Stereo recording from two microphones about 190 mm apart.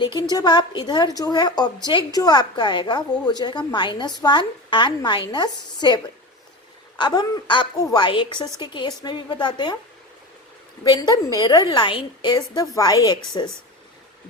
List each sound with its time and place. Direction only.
0.0 s a woman's voice: 20° left (ahead or behind)
7.0 s a woman's voice: 20° left (ahead or behind)
10.8 s a woman's voice: 20° left (ahead or behind)